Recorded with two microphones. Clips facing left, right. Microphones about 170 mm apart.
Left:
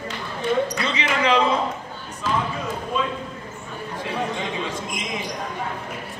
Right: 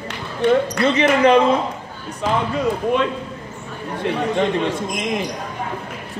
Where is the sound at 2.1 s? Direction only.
70° right (ahead or behind).